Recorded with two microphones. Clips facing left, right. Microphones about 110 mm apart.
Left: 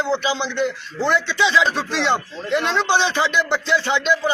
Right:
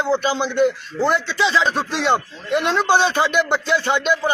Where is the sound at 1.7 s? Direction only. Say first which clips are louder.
Right 2 dB; 50° right (ahead or behind).